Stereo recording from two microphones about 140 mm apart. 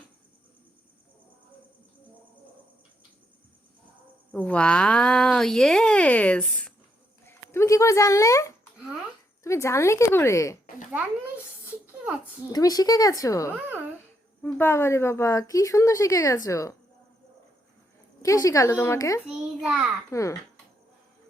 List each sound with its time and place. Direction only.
4.3 s speech: 10° left (ahead or behind)
7.3 s a woman's voice: 20° left (ahead or behind)
11.6 s a sound: 10° right (ahead or behind)
12.5 s a woman's voice: 25° left (ahead or behind)
18.2 s a woman's voice: 25° left (ahead or behind)
19.3 s a child's voice: 5° right (ahead or behind)
20.1 s a woman's voice: 20° left (ahead or behind)